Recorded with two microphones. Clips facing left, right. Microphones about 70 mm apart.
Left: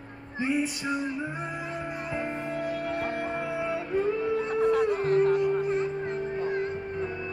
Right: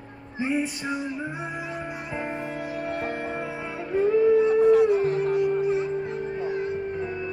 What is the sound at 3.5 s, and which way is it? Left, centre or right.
Music, centre.